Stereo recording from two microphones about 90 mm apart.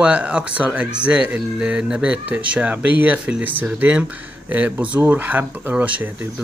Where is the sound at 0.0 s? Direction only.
15° right (ahead or behind).